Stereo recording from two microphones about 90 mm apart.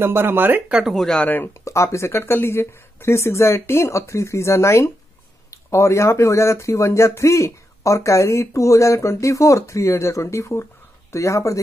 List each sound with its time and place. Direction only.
0.0 s speech: 25° right (ahead or behind)
0.7 s speech: 10° right (ahead or behind)
0.9 s speech: 5° left (ahead or behind)
1.2 s speech: 20° left (ahead or behind)
1.6 s speech: 35° left (ahead or behind)